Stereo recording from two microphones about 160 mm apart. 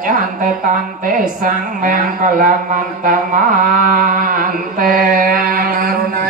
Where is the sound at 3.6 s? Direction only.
55° right (ahead or behind).